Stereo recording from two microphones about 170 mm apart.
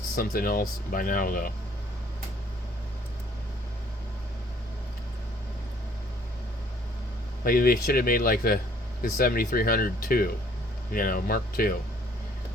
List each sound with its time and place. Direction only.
0.2 s speech: 60° left (ahead or behind)
7.4 s speech: 60° left (ahead or behind)